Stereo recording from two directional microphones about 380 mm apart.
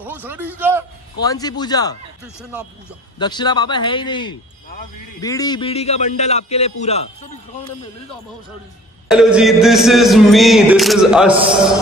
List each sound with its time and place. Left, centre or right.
0.0 s a man's voice: centre
1.2 s a man's voice: centre
3.2 s a man's voice: centre
9.1 s a man's voice: centre